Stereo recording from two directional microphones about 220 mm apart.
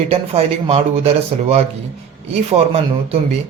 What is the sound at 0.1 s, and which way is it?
Speech, 25° right (ahead or behind).